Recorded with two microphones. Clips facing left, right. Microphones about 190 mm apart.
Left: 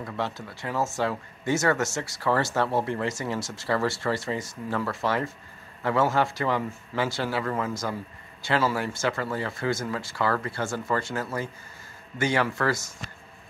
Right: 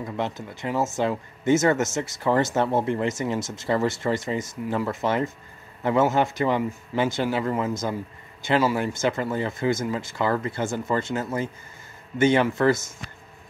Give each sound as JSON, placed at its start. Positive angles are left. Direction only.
{"t": 0.0, "sound": "speech", "side_deg": -20}